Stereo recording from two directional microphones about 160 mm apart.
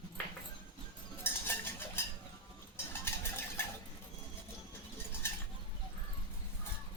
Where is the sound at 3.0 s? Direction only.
15° left (ahead or behind).